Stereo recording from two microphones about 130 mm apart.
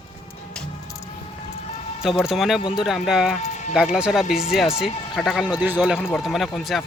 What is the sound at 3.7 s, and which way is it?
Speech, 5° right (ahead or behind).